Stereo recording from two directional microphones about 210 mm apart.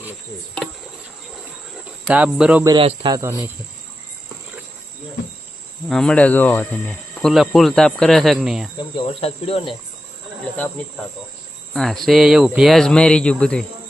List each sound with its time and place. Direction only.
2.0 s speech: 5° right (ahead or behind)
2.6 s speech: 25° right (ahead or behind)
5.9 s speech: 5° left (ahead or behind)
8.8 s speech: 25° left (ahead or behind)
11.7 s speech: centre (ahead or behind)